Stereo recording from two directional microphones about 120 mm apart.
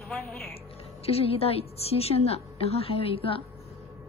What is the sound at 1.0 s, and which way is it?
A woman's voice, 55° left (ahead or behind).